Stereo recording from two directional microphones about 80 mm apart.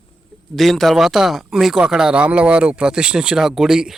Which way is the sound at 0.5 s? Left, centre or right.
Centre.